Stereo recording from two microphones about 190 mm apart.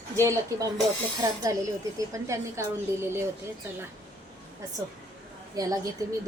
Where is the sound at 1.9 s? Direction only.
15° right (ahead or behind).